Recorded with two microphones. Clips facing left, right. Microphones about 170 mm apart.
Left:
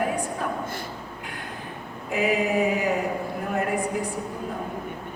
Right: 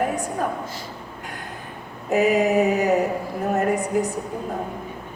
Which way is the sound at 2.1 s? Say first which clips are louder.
Right 6 dB; 45° right (ahead or behind).